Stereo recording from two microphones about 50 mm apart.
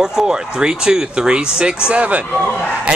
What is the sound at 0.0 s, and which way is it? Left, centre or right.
Speech, centre.